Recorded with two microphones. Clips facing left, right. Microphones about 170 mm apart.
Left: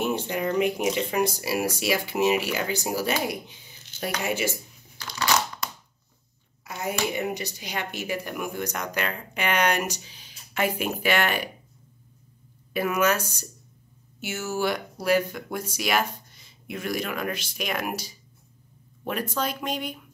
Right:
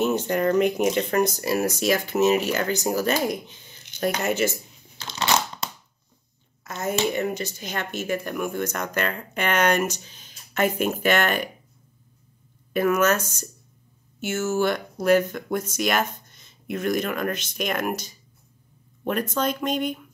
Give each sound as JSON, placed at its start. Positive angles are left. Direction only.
{"t": 0.0, "sound": "speech", "side_deg": 10}
{"t": 4.9, "sound": "a sound", "side_deg": -25}
{"t": 6.6, "sound": "a sound", "side_deg": 10}
{"t": 7.1, "sound": "speech", "side_deg": 15}
{"t": 12.7, "sound": "speech", "side_deg": 10}
{"t": 14.3, "sound": "speech", "side_deg": 10}
{"t": 16.3, "sound": "a sound", "side_deg": -50}
{"t": 17.0, "sound": "speech", "side_deg": 5}
{"t": 19.3, "sound": "speech", "side_deg": 5}